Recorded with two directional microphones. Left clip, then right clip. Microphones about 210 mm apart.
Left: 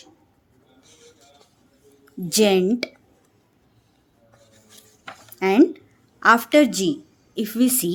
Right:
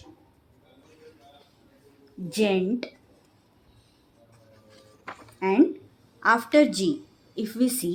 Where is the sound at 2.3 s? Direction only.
60° left (ahead or behind).